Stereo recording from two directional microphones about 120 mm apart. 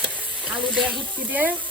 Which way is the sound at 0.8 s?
15° right (ahead or behind).